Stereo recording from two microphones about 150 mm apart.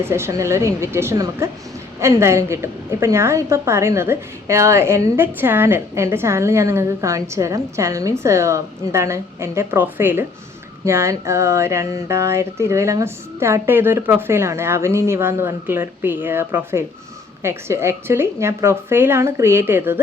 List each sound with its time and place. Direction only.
0.0 s a woman's voice: 15° right (ahead or behind)